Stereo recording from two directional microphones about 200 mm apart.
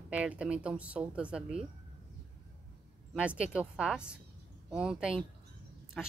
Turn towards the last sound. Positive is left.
turn(degrees=5)  # may be behind; listen again after turning